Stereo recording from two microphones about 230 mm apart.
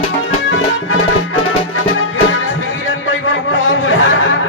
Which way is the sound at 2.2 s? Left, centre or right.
Left.